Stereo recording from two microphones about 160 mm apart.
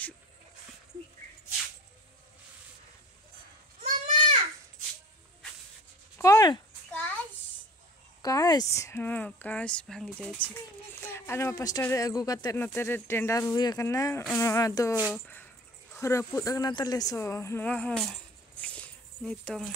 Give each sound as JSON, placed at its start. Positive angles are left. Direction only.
{"t": 3.8, "sound": "goat", "side_deg": -55}
{"t": 6.1, "sound": "a sound", "side_deg": 20}
{"t": 8.2, "sound": "speech", "side_deg": 25}
{"t": 11.0, "sound": "speech", "side_deg": 15}
{"t": 12.5, "sound": "speech", "side_deg": 10}
{"t": 15.0, "sound": "speech", "side_deg": -5}
{"t": 15.2, "sound": "speech", "side_deg": 10}